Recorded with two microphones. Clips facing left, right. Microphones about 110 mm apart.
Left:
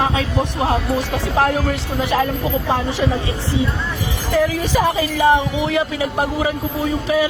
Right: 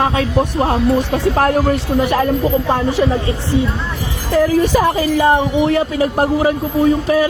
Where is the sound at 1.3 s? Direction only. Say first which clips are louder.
Right 1 dB; 50° right (ahead or behind).